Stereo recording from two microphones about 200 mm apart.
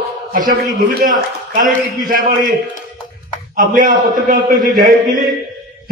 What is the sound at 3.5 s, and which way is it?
A man's voice, 40° right (ahead or behind).